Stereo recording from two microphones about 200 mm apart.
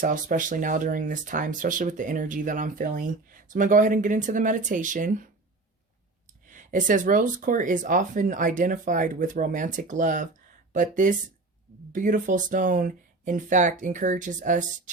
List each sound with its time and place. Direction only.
0.0 s speech: 40° right (ahead or behind)
6.5 s speech: 40° right (ahead or behind)